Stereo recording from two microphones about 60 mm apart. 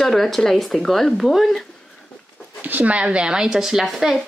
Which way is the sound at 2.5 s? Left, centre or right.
Right.